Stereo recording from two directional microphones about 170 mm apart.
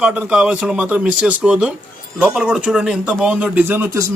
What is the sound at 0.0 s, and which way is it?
Speech, 5° right (ahead or behind).